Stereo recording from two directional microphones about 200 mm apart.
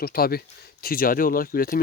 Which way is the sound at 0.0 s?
50° left (ahead or behind).